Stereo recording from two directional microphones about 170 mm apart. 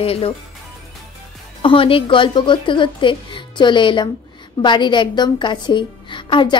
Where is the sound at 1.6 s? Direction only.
30° left (ahead or behind).